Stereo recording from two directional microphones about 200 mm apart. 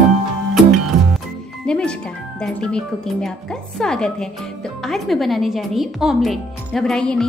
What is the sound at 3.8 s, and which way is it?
Speech, 5° left (ahead or behind).